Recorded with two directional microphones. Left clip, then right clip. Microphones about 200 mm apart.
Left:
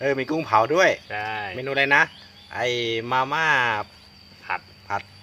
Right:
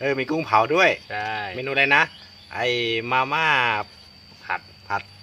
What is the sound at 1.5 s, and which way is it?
Speech, 5° left (ahead or behind).